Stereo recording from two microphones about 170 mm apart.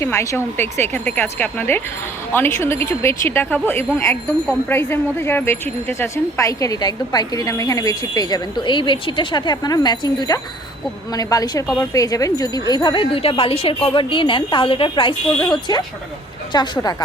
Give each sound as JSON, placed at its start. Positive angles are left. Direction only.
{"t": 0.0, "sound": "speech", "side_deg": 15}